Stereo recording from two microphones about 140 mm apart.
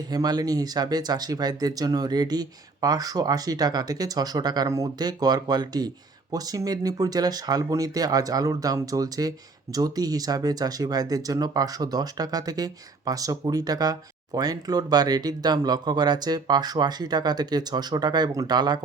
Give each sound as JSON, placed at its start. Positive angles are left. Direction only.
{"t": 0.1, "sound": "speech", "side_deg": -30}